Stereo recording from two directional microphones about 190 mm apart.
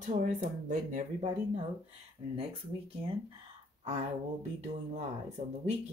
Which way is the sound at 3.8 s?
35° right (ahead or behind).